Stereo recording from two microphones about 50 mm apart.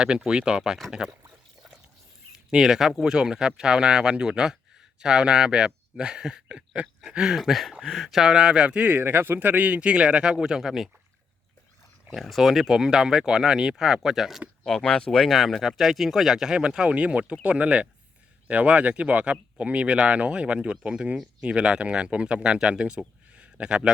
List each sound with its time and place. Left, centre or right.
0.3 s speech: centre
2.5 s speech: centre
7.2 s speech: centre
8.7 s a man's voice: right
9.0 s speech: right; by 10.8 s centre
12.1 s speech: centre
14.6 s speech: centre